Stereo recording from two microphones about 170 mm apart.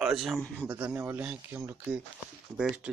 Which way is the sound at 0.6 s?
15° right (ahead or behind).